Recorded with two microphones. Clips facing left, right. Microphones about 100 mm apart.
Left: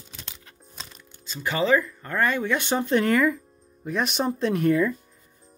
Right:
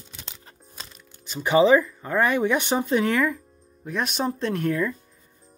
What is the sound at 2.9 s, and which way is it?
Speech, centre (ahead or behind).